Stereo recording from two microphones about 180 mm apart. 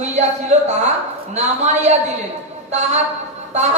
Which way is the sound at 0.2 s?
40° right (ahead or behind).